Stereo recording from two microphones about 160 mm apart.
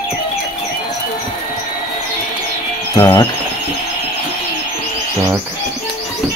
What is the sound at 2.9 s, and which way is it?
Speech, 20° left (ahead or behind).